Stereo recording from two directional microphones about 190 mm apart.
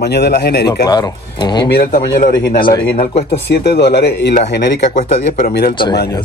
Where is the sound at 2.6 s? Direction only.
25° left (ahead or behind).